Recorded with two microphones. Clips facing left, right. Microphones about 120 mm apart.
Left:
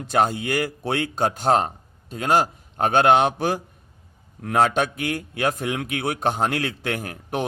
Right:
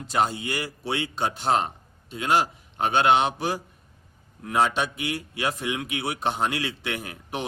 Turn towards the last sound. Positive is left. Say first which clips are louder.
# left 5 dB
turn(degrees=45)  # may be behind; listen again after turning